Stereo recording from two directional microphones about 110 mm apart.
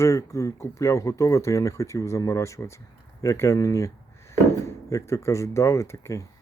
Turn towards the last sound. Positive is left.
turn(degrees=25)  # may be behind; listen again after turning